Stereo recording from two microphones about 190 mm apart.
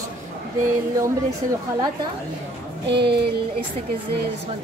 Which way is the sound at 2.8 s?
60° right (ahead or behind).